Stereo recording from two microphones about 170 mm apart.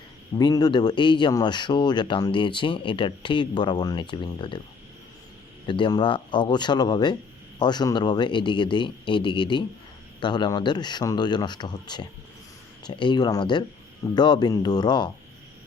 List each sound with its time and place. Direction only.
0.3 s speech: 25° left (ahead or behind)
5.6 s speech: 30° left (ahead or behind)